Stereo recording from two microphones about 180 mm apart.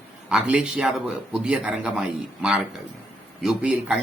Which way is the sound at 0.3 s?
5° right (ahead or behind).